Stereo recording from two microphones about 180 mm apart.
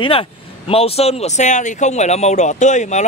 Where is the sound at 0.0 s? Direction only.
30° left (ahead or behind).